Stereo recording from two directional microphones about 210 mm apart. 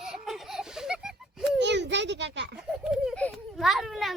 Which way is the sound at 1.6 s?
55° right (ahead or behind).